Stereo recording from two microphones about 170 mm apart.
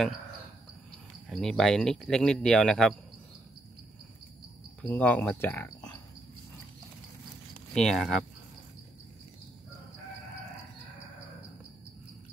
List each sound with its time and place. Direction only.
1.3 s a man's voice: 5° left (ahead or behind)
4.8 s speech: 10° left (ahead or behind)
7.7 s a man's voice: centre (ahead or behind)